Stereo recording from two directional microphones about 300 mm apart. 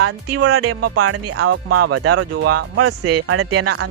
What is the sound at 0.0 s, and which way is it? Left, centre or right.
Speech, right.